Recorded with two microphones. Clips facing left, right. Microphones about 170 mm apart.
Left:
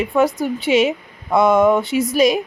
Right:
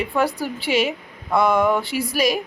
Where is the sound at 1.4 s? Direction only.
25° left (ahead or behind).